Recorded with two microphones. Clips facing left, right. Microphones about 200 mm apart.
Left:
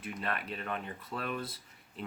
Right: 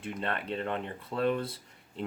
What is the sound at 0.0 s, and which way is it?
Speech, 30° right (ahead or behind).